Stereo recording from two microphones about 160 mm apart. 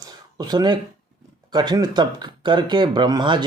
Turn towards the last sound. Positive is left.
turn(degrees=-30)  # may be behind; listen again after turning